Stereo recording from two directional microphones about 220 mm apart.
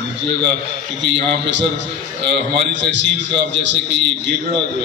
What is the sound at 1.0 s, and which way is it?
A man's voice, 55° right (ahead or behind).